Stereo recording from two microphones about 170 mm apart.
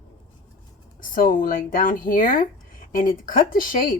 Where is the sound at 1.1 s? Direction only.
55° left (ahead or behind).